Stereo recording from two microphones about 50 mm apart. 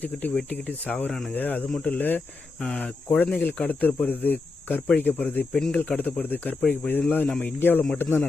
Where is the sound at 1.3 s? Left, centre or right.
Left.